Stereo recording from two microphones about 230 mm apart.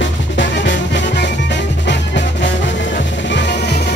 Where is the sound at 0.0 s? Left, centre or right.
Left.